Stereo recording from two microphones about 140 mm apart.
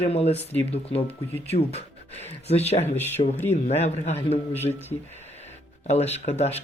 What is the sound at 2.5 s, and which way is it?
Speech, 50° left (ahead or behind).